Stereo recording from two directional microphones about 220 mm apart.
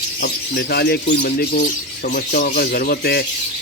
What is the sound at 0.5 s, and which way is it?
Speech, 45° left (ahead or behind).